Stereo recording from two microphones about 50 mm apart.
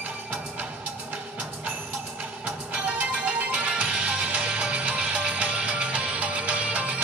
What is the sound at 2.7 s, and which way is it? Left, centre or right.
Music, centre.